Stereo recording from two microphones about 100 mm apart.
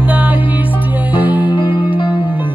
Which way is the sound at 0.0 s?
15° right (ahead or behind).